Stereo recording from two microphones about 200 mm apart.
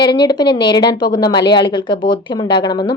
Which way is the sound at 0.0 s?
20° left (ahead or behind).